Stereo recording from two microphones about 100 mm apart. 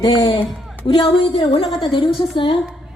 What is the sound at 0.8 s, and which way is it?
A woman's voice, 55° left (ahead or behind).